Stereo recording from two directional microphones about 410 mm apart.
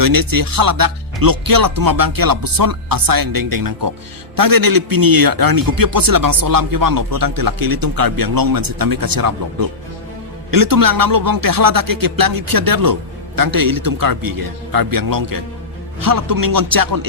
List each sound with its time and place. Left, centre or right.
0.0 s a man's voice: right